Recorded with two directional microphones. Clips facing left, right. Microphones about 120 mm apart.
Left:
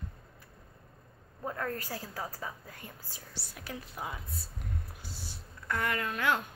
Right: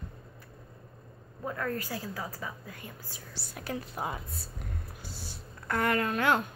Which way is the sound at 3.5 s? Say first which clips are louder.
Right 7 dB; 50° right (ahead or behind).